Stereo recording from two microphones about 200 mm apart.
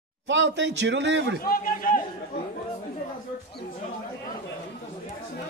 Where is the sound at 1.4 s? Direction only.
45° left (ahead or behind).